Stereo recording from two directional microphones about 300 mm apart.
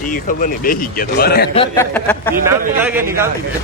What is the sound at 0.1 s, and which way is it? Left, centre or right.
Speech, left.